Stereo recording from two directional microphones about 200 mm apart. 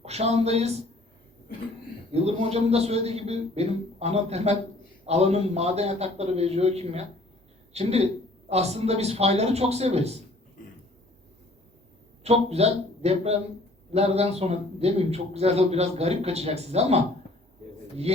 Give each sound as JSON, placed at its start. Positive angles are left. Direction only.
{"t": 0.0, "sound": "a man's voice", "side_deg": -30}
{"t": 2.1, "sound": "a man's voice", "side_deg": -30}
{"t": 12.2, "sound": "a man's voice", "side_deg": -30}